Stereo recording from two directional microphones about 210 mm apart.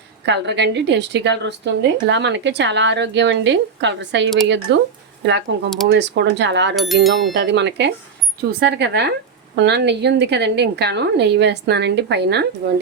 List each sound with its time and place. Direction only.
0.3 s a woman's voice: 55° right (ahead or behind)
6.7 s speech: centre (ahead or behind)
7.3 s a woman's voice: 55° right (ahead or behind)